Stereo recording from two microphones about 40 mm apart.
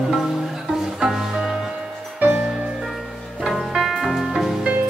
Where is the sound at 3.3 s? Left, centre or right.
Centre.